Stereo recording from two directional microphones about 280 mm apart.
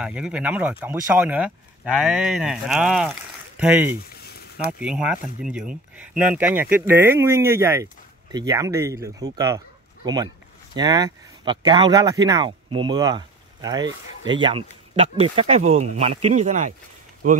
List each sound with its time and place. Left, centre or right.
0.0 s speech: centre
4.1 s a sound: left
4.6 s speech: centre; by 16.7 s right